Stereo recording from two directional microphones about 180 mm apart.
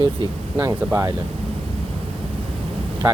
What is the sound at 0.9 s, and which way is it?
Speech, 15° right (ahead or behind).